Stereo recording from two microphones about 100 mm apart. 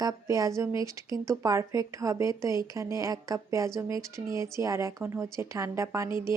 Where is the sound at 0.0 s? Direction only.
35° right (ahead or behind).